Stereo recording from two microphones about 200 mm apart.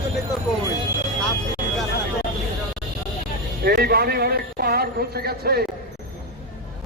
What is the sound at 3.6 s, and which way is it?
Speech, 50° right (ahead or behind).